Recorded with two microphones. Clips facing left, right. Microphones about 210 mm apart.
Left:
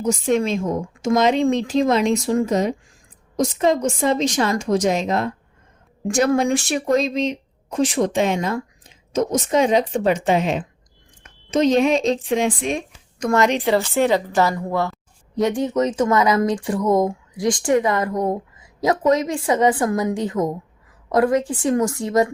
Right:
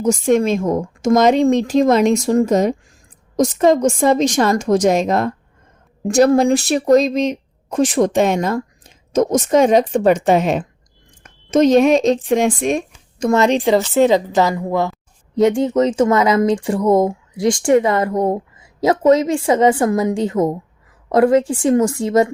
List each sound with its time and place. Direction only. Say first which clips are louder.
0.0 s speech: right 5 dB; 45° right (ahead or behind)
13.1 s a woman's voice: right 4 dB; 25° right (ahead or behind)
15.4 s speech: right 5 dB; 25° right (ahead or behind)